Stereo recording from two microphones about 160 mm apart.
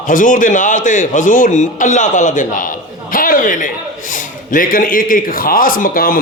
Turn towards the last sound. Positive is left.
turn(degrees=65)  # may be behind; listen again after turning